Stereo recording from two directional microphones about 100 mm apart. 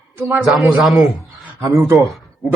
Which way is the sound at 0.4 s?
Centre (ahead or behind).